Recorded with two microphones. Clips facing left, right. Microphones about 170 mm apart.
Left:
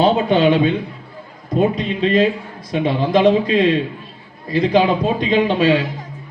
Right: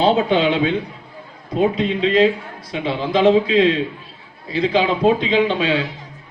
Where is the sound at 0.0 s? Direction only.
50° left (ahead or behind).